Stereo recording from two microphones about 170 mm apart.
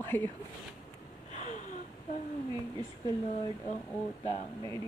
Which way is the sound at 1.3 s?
45° left (ahead or behind).